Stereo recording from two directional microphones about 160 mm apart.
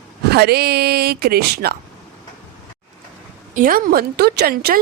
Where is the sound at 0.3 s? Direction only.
85° right.